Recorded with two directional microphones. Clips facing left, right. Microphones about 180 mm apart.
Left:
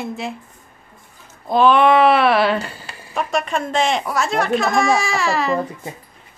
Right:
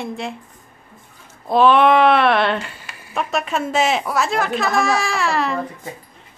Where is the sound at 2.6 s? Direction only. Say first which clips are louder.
Left 3 dB; 35° left (ahead or behind).